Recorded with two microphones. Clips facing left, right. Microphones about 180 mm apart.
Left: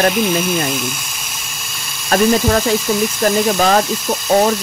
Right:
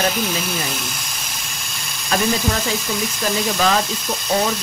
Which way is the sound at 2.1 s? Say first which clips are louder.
Left 7 dB; 50° left (ahead or behind).